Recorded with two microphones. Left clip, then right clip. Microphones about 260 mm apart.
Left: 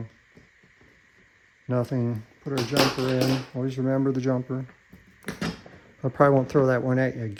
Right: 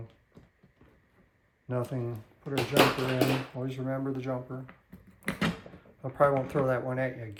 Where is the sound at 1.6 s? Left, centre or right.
Left.